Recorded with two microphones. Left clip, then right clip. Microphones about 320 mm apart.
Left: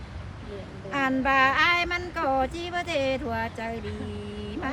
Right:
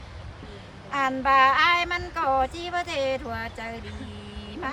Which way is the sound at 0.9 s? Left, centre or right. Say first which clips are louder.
Right 2 dB; centre.